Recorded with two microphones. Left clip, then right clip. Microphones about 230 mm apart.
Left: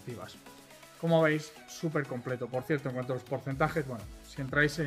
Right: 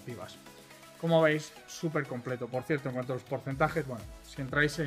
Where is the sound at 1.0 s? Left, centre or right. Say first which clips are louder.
Right 1 dB; centre.